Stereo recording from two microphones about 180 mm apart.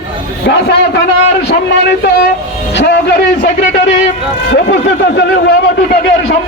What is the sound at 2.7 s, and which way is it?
Speech, 70° left (ahead or behind).